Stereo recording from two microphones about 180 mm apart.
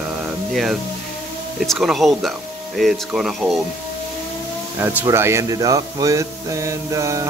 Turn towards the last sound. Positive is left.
turn(degrees=-15)  # may be behind; listen again after turning